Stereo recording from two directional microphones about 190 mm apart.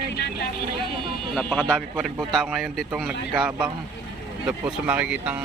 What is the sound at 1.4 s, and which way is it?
Speech, 5° left (ahead or behind).